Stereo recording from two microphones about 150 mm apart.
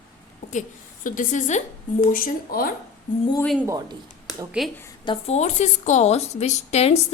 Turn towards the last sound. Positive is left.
turn(degrees=45)  # may be behind; listen again after turning